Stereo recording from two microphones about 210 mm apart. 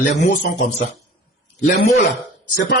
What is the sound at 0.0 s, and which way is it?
Speech, 40° left (ahead or behind).